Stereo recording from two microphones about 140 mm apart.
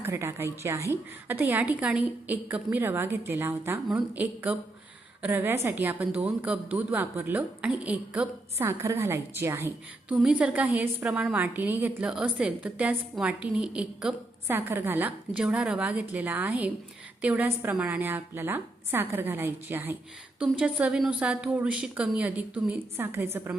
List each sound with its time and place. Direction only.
0.0 s a woman's voice: 20° right (ahead or behind)